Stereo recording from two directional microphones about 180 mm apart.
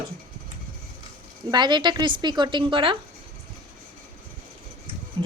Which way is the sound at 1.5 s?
25° right (ahead or behind).